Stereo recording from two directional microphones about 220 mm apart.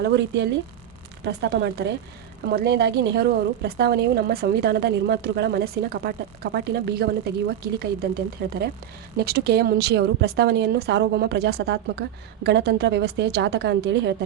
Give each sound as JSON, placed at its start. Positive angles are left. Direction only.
{"t": 0.0, "sound": "a woman's voice", "side_deg": -50}